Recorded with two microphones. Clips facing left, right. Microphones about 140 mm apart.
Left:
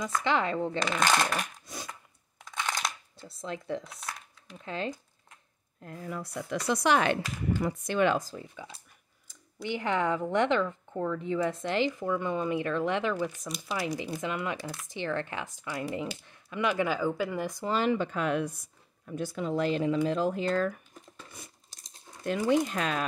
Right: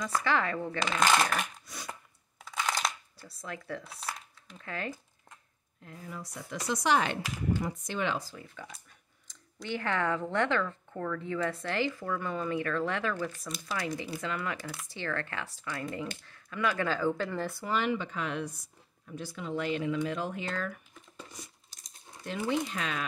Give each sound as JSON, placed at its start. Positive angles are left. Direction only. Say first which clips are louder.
{"t": 0.2, "sound": "speech", "louder": "left 4 dB", "side_deg": 20}
{"t": 0.7, "sound": "speech", "louder": "right 2 dB", "side_deg": -5}
{"t": 2.4, "sound": "a sound", "louder": "right 1 dB", "side_deg": 0}
{"t": 3.2, "sound": "speech", "louder": "left 4 dB", "side_deg": 25}
{"t": 6.0, "sound": "speech", "louder": "left 6 dB", "side_deg": 65}
{"t": 8.5, "sound": "speech", "louder": "left 1 dB", "side_deg": 25}
{"t": 17.6, "sound": "speech", "louder": "left 4 dB", "side_deg": 40}
{"t": 22.2, "sound": "speech", "louder": "left 6 dB", "side_deg": 50}